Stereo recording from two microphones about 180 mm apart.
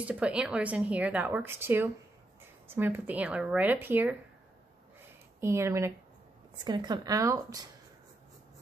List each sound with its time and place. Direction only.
0.0 s a woman's voice: 5° right (ahead or behind)
5.4 s a woman's voice: 15° right (ahead or behind)